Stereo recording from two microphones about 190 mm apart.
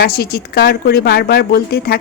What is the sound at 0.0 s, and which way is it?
A woman's voice, 55° left (ahead or behind).